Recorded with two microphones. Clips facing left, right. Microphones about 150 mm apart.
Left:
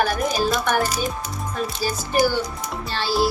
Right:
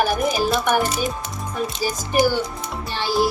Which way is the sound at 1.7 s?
15° right (ahead or behind).